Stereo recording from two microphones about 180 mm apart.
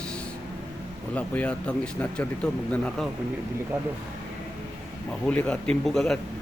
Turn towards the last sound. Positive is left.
turn(degrees=0)  # may be behind; listen again after turning